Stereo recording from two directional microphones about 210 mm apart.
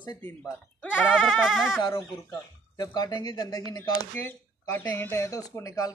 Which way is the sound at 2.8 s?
20° left (ahead or behind).